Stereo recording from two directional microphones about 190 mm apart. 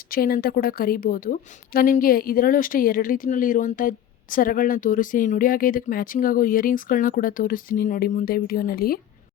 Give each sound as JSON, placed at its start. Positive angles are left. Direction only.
{"t": 0.1, "sound": "a woman's voice", "side_deg": 50}